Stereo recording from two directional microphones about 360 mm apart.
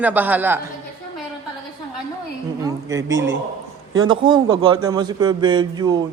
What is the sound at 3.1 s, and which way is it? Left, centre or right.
A man's voice, right.